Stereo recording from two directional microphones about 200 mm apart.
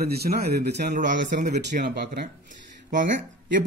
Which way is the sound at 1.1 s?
55° right (ahead or behind).